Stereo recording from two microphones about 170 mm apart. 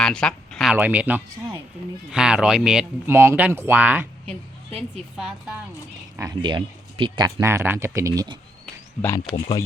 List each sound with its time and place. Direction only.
0.0 s speech: 5° left (ahead or behind)
5.1 s speech: 5° right (ahead or behind)
6.1 s speech: 25° right (ahead or behind)
7.3 s speech: 15° right (ahead or behind)
9.0 s speech: 15° left (ahead or behind)